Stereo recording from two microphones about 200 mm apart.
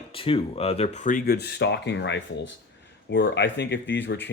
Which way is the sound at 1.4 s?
55° left (ahead or behind).